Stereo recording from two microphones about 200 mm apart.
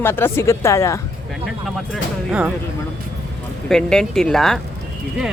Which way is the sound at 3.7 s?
5° left (ahead or behind).